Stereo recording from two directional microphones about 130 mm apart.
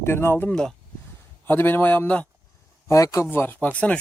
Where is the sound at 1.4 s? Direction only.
15° left (ahead or behind).